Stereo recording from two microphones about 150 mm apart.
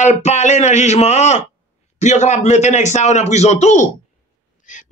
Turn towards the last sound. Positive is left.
turn(degrees=55)  # may be behind; listen again after turning